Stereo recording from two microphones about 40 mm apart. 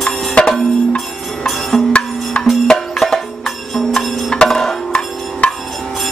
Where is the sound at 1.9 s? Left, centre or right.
Left.